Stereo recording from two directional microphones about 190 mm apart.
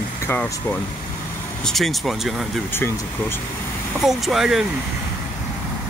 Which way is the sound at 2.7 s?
10° left (ahead or behind).